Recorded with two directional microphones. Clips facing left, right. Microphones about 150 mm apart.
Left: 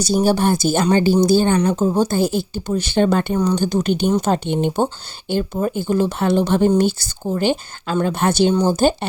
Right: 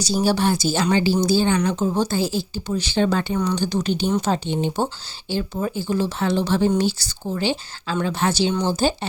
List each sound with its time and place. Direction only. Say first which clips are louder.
0.0 s speech: left 4 dB; 50° left (ahead or behind)
1.5 s a woman's voice: left 4 dB; 40° left (ahead or behind)
2.0 s speech: left 4 dB; 50° left (ahead or behind)
5.3 s speech: left 4 dB; 45° left (ahead or behind)